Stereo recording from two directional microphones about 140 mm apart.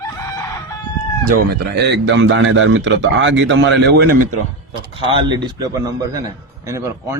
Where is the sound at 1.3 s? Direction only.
90° right.